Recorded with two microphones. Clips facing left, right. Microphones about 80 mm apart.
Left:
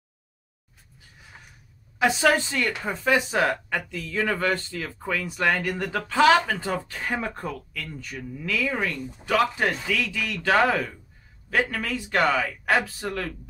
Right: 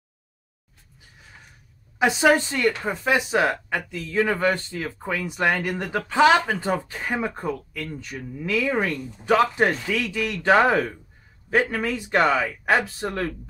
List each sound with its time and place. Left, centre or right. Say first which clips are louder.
2.0 s speech: right 2 dB; centre